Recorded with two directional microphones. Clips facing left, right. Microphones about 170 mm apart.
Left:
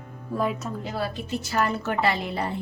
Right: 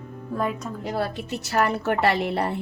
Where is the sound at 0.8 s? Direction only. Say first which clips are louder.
Right 6 dB; 65° right (ahead or behind).